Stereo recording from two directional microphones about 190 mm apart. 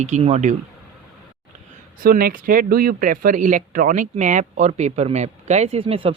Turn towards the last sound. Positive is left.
turn(degrees=-30)  # may be behind; listen again after turning